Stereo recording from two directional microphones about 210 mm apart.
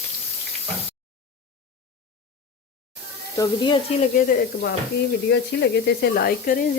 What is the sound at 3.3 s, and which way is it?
Speech, 20° left (ahead or behind).